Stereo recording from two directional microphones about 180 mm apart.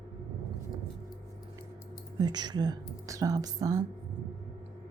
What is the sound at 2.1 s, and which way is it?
Speech, 25° right (ahead or behind).